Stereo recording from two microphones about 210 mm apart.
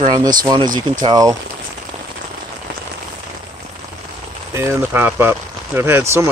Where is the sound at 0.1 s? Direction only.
20° right (ahead or behind).